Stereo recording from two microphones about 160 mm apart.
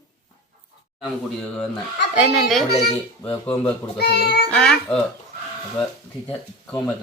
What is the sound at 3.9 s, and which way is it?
Speech, 90° left.